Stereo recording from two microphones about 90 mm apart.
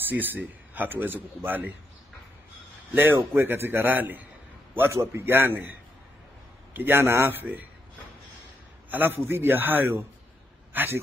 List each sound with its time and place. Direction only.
0.0 s a man's voice: 20° right (ahead or behind)
2.9 s a man's voice: 25° right (ahead or behind)
8.9 s a man's voice: 25° right (ahead or behind)